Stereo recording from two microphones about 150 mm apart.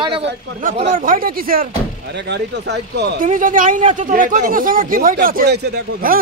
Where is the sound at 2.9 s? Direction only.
80° right.